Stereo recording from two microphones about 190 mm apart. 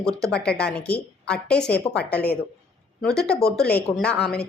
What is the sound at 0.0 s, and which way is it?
A woman's voice, centre (ahead or behind).